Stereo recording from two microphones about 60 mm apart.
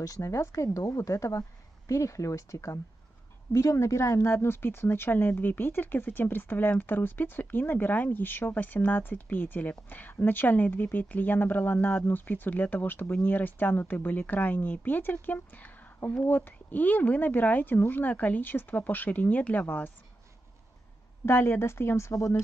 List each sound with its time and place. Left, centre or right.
0.0 s speech: left
0.3 s speech: left
21.3 s speech: left